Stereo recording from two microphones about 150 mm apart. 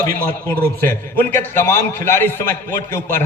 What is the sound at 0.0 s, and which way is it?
A man's voice, 15° left (ahead or behind).